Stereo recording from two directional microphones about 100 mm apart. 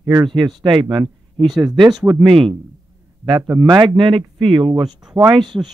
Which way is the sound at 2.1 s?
55° right (ahead or behind).